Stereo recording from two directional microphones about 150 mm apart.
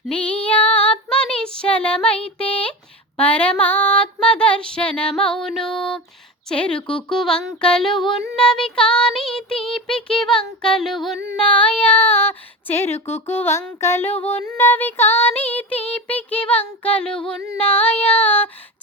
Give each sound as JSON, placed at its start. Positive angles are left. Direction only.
{"t": 0.1, "sound": "child singing", "side_deg": 10}
{"t": 3.2, "sound": "female singing", "side_deg": 10}
{"t": 7.1, "sound": "child singing", "side_deg": 5}
{"t": 13.2, "sound": "female singing", "side_deg": 15}